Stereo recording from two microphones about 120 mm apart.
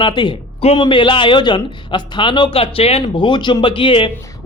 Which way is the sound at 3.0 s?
40° left (ahead or behind).